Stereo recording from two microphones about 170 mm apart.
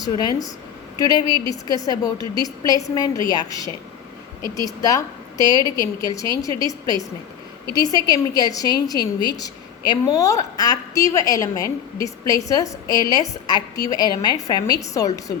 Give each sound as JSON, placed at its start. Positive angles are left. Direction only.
{"t": 0.0, "sound": "a woman's voice", "side_deg": 20}